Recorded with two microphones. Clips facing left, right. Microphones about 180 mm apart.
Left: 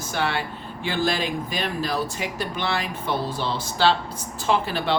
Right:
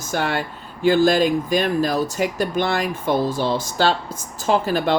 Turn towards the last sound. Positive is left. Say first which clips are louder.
# right 4 dB
turn(degrees=-45)  # may be behind; listen again after turning